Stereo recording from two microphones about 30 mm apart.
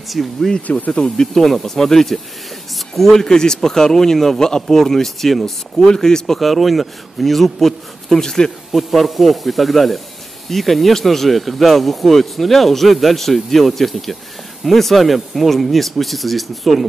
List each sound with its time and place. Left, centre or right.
0.1 s speech: centre
0.6 s speech: left
1.0 s speech: left
6.4 s speech: centre
8.2 s speech: left
8.7 s speech: centre